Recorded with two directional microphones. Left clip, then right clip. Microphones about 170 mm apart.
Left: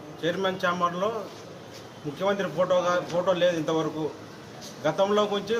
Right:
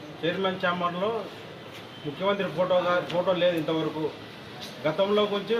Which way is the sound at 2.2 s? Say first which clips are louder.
Left 1 dB; 15° left (ahead or behind).